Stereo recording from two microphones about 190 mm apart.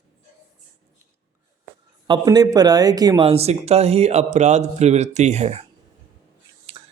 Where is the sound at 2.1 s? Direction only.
20° right (ahead or behind).